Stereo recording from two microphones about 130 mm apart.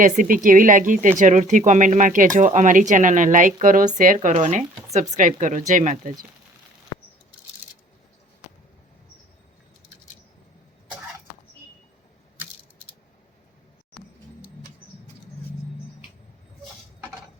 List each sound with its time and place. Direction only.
0.0 s speech: 90° right
1.2 s speech: 70° right (ahead or behind)